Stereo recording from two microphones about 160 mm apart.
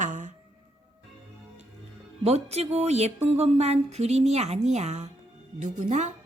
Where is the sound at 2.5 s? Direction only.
40° right (ahead or behind).